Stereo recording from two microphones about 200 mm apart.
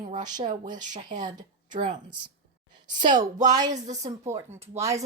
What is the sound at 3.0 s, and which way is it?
Speech, 20° right (ahead or behind).